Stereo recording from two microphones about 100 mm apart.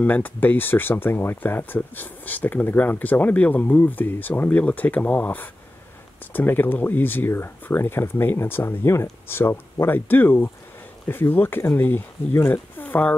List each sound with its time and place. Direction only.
0.0 s speech: 15° left (ahead or behind)